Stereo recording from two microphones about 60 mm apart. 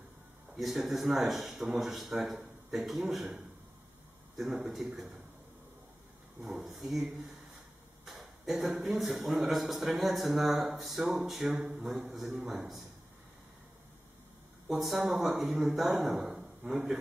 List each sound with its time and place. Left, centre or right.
0.5 s speech: centre
6.7 s speech: centre
14.7 s a man's voice: centre